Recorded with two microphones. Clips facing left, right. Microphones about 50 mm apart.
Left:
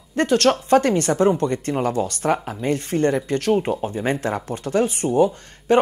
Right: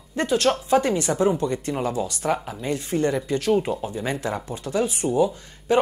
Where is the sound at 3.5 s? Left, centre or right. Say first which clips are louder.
Left 2 dB; left.